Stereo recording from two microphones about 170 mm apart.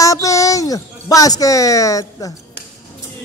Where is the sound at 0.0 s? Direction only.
20° left (ahead or behind).